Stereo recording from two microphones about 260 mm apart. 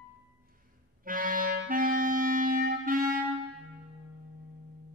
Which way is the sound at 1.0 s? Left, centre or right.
Right.